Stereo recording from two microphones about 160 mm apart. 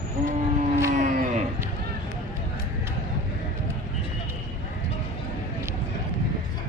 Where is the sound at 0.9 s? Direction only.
50° right (ahead or behind).